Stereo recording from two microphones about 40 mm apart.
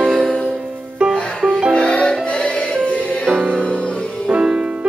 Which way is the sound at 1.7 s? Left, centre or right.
Left.